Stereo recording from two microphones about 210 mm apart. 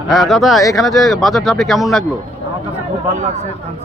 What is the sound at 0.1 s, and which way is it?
Speech, centre (ahead or behind).